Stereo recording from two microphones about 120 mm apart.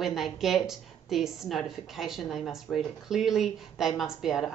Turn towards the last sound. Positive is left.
turn(degrees=-5)  # may be behind; listen again after turning